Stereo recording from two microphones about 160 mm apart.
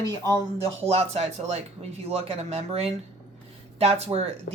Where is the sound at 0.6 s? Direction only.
35° right (ahead or behind).